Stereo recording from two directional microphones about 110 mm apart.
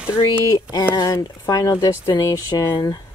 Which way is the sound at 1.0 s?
35° left (ahead or behind).